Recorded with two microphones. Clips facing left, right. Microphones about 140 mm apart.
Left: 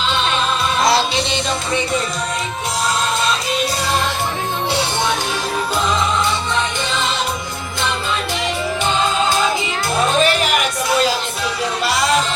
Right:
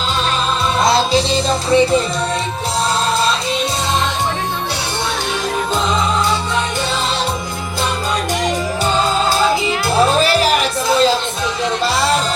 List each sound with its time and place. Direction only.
1.1 s music: 35° right (ahead or behind)
10.0 s music: 35° right (ahead or behind)